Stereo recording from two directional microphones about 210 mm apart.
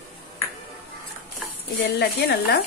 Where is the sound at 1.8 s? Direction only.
55° left (ahead or behind).